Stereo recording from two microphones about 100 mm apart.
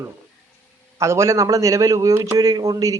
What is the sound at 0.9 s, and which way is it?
A man's voice, 30° right (ahead or behind).